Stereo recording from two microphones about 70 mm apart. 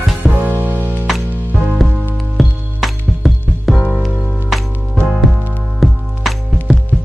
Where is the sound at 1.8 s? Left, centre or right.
Centre.